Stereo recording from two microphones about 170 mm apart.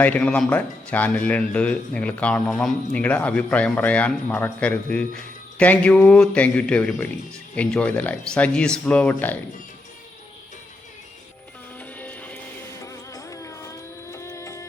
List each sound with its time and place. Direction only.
0.0 s speech: 10° left (ahead or behind)
11.8 s music: 10° left (ahead or behind)